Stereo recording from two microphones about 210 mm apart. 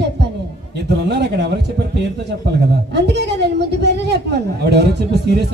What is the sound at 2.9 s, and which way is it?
A woman's voice, 55° right (ahead or behind).